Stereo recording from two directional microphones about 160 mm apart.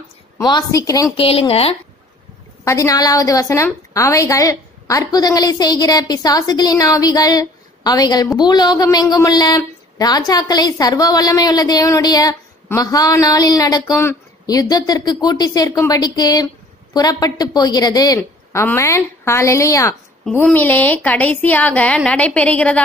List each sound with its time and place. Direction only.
0.4 s a woman's voice: 25° left (ahead or behind)
1.1 s a woman's voice: 35° left (ahead or behind)
2.6 s a woman's voice: 20° left (ahead or behind)
20.2 s a woman's voice: 5° left (ahead or behind)